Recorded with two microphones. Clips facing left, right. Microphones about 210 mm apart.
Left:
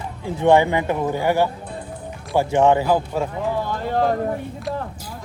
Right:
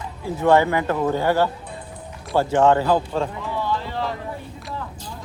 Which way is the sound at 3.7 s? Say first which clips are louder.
Left 6 dB; 50° left (ahead or behind).